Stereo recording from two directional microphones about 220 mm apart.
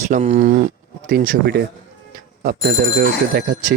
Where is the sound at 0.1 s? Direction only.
35° right (ahead or behind).